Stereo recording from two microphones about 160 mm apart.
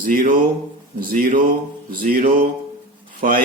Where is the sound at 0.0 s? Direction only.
60° right (ahead or behind).